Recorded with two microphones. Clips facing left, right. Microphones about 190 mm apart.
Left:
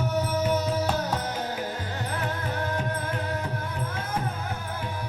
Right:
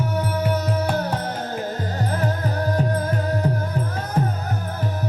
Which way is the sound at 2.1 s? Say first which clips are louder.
Right 6 dB; 40° right (ahead or behind).